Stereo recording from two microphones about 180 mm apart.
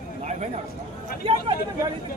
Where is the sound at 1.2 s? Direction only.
30° right (ahead or behind).